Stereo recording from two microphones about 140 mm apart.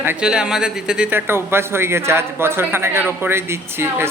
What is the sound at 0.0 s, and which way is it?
A man's voice, 10° right (ahead or behind).